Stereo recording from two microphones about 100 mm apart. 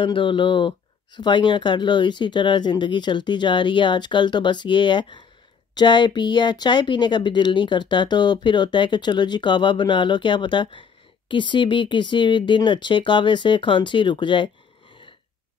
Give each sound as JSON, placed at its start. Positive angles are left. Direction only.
{"t": 0.0, "sound": "speech", "side_deg": 55}